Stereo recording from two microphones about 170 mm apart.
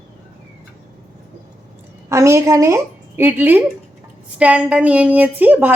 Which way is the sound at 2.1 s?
15° right (ahead or behind).